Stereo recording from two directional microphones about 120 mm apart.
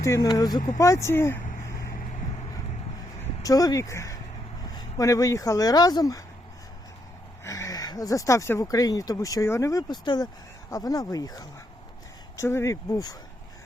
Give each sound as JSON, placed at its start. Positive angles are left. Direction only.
{"t": 0.0, "sound": "speech", "side_deg": 30}
{"t": 2.0, "sound": "vehicle", "side_deg": 70}
{"t": 3.4, "sound": "speech", "side_deg": 30}
{"t": 7.4, "sound": "speech", "side_deg": 25}